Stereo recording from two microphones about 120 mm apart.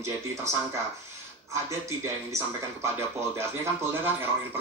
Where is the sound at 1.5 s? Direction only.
25° right (ahead or behind).